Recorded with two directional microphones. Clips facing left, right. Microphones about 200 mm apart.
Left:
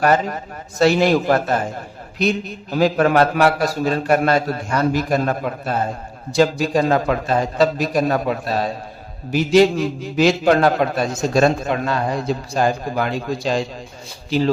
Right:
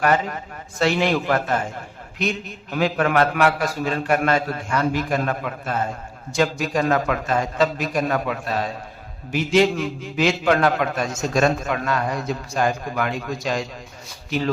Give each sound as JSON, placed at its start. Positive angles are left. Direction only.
{"t": 0.0, "sound": "a man's voice", "side_deg": 35}